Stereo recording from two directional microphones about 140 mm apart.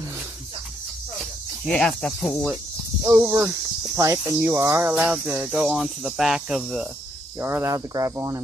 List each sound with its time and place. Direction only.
1.7 s speech: 5° left (ahead or behind)
3.1 s speech: 15° right (ahead or behind)
3.9 s cricket: 25° right (ahead or behind)
4.5 s speech: 20° right (ahead or behind)
7.3 s cricket: 20° right (ahead or behind)